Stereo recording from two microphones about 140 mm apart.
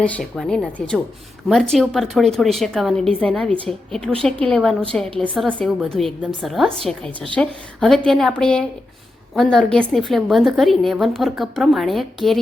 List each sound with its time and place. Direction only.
0.0 s a woman's voice: 5° left (ahead or behind)